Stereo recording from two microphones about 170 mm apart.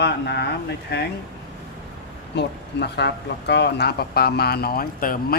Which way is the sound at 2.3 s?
80° left.